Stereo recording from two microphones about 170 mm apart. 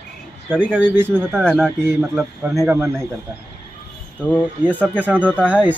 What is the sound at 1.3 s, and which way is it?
Speech, 5° left (ahead or behind).